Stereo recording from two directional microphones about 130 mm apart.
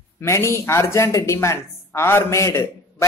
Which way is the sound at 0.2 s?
20° left (ahead or behind).